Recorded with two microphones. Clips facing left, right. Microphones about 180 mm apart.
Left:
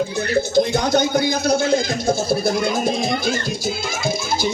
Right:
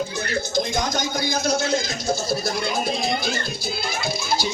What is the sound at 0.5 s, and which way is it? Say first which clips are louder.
Speech: left 7 dB; 60° left (ahead or behind).